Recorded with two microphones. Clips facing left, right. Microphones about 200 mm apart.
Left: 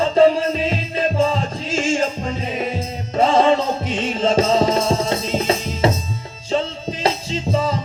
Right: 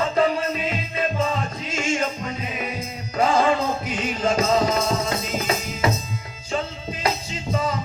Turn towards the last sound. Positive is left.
turn(degrees=30)  # may be behind; listen again after turning